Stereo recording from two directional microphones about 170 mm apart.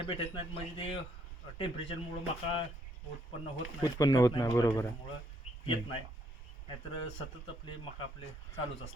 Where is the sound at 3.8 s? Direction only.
20° left (ahead or behind).